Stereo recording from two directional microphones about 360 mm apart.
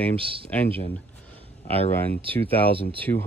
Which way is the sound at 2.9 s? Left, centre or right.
Centre.